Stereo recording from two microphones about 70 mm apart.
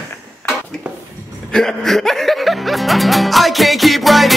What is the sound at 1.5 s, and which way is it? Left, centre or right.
Music, centre.